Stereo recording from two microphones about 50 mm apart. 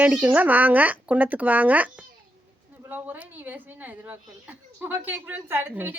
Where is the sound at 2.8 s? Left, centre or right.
Right.